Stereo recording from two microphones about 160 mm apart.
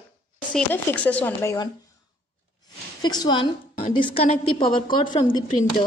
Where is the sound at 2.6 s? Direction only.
25° left (ahead or behind).